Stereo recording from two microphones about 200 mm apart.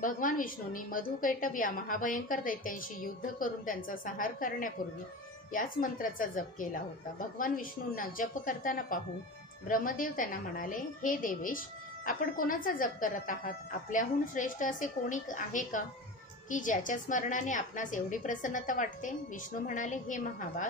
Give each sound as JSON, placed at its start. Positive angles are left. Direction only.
{"t": 0.0, "sound": "a woman's voice", "side_deg": 40}